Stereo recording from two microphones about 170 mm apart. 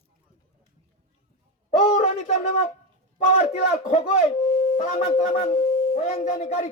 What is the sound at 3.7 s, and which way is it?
A man's voice, 40° left (ahead or behind).